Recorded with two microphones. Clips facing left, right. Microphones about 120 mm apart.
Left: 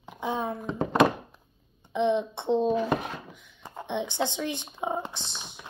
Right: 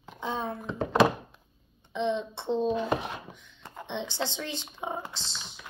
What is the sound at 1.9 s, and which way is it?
Speech, 15° left (ahead or behind).